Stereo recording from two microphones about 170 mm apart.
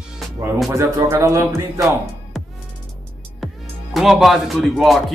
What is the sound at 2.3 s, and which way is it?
Music, centre (ahead or behind).